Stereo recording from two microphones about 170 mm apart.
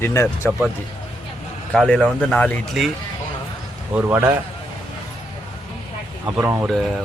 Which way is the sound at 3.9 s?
10° right (ahead or behind).